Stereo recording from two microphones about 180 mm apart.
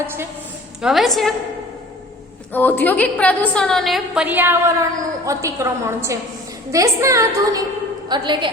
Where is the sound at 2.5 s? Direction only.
10° left (ahead or behind).